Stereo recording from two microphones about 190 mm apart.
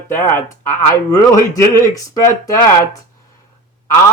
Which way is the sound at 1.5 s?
15° left (ahead or behind).